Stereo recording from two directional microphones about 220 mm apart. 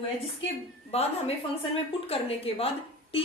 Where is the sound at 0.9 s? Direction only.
30° left (ahead or behind).